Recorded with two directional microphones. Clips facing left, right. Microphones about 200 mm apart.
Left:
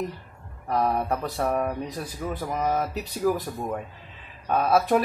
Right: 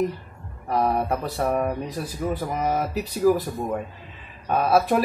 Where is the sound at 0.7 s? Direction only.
5° right (ahead or behind).